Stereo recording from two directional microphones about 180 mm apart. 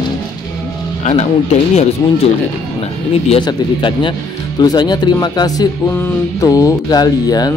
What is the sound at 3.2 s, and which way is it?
Speech, 25° left (ahead or behind).